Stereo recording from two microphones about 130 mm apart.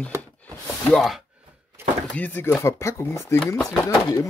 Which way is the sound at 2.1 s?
15° left (ahead or behind).